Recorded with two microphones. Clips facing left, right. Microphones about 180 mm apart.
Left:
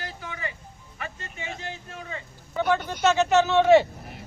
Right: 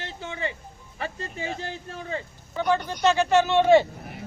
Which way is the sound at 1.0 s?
35° right (ahead or behind).